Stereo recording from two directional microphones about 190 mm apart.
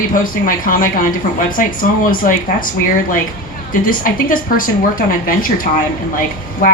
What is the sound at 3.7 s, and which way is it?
A woman's voice, 50° left (ahead or behind).